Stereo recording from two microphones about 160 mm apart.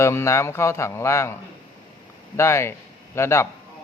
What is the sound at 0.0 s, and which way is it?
Speech, 15° left (ahead or behind).